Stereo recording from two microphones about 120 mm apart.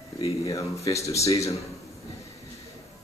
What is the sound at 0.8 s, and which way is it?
Speech, 25° left (ahead or behind).